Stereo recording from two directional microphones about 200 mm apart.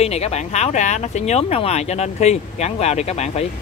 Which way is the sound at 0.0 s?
30° left (ahead or behind).